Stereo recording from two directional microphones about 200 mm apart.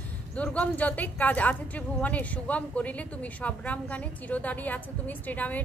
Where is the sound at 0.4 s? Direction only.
5° left (ahead or behind).